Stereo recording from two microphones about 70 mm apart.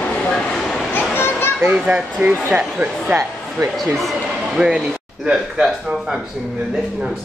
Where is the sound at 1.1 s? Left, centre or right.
Left.